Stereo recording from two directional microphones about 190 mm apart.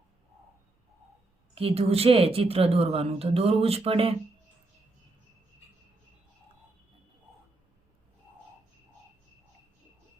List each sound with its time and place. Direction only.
1.5 s a woman's voice: 30° right (ahead or behind)